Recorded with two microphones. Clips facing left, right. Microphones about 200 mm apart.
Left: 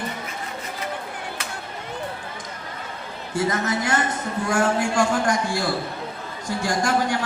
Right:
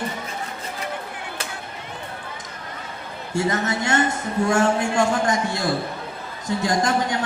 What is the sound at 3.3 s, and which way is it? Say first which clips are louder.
A man's voice: right 1 dB; 25° right (ahead or behind).